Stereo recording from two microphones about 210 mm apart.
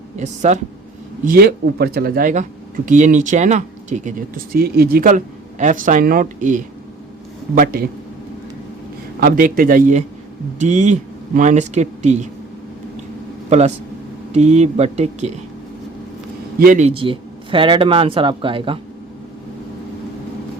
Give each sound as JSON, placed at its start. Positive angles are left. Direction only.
{"t": 0.2, "sound": "speech", "side_deg": -35}
{"t": 1.2, "sound": "speech", "side_deg": -45}
{"t": 9.2, "sound": "speech", "side_deg": -40}
{"t": 13.5, "sound": "speech", "side_deg": -30}
{"t": 16.6, "sound": "speech", "side_deg": -40}